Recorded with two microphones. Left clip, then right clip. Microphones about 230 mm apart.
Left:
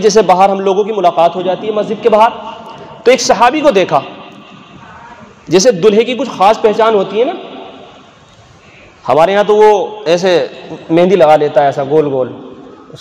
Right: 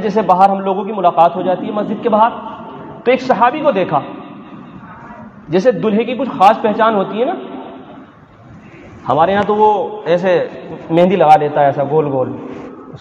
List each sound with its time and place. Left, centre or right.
0.0 s a man's voice: left
5.5 s a man's voice: left
9.0 s a man's voice: left